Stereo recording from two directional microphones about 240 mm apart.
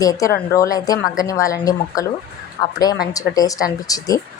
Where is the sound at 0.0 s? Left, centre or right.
Centre.